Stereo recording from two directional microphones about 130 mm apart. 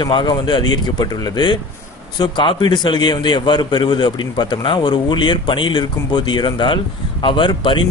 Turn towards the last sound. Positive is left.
turn(degrees=40)  # may be behind; listen again after turning